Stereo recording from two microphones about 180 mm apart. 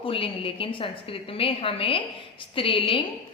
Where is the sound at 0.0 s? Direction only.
30° left (ahead or behind).